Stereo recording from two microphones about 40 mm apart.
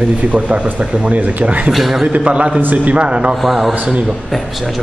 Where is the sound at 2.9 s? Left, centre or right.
Right.